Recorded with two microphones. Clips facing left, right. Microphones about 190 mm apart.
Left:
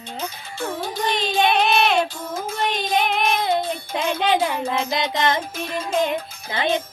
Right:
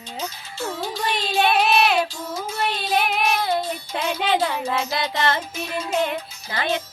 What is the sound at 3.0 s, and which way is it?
Child singing, 5° right (ahead or behind).